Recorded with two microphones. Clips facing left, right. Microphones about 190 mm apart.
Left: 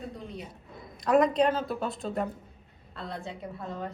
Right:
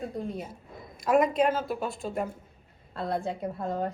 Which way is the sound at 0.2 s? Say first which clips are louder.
Right 7 dB; 45° right (ahead or behind).